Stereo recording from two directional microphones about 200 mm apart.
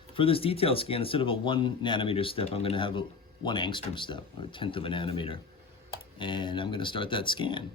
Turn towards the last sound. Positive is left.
turn(degrees=25)  # may be behind; listen again after turning